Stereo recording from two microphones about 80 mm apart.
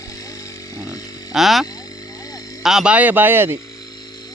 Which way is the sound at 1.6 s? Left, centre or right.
Left.